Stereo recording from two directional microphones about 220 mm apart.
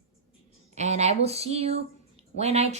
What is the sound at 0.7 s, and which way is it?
Speech, 30° right (ahead or behind).